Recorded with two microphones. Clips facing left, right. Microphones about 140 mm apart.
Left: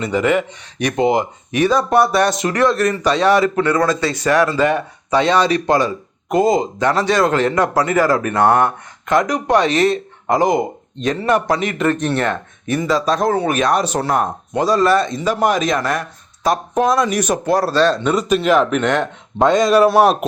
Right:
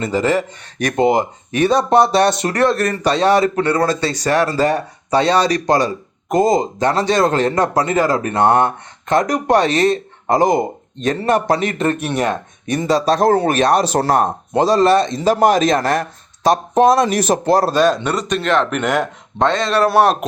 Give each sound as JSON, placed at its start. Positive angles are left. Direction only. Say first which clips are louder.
{"t": 0.0, "sound": "speech", "louder": "even", "side_deg": -35}
{"t": 2.4, "sound": "speech", "louder": "even", "side_deg": -35}
{"t": 9.2, "sound": "speech", "louder": "right 1 dB", "side_deg": -40}
{"t": 11.9, "sound": "speech", "louder": "even", "side_deg": -10}
{"t": 12.7, "sound": "speech", "louder": "right 2 dB", "side_deg": -30}
{"t": 17.7, "sound": "speech", "louder": "right 1 dB", "side_deg": -15}
{"t": 18.0, "sound": "a man's voice", "louder": "left 3 dB", "side_deg": 5}
{"t": 19.4, "sound": "a sound", "louder": "left 4 dB", "side_deg": 10}
{"t": 19.9, "sound": "a man's voice", "louder": "left 1 dB", "side_deg": 0}